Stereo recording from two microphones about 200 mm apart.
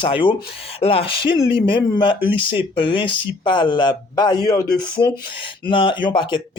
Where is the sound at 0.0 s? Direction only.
25° left (ahead or behind).